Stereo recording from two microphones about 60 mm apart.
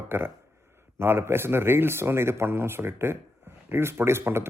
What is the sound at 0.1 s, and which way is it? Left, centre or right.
Speech, right.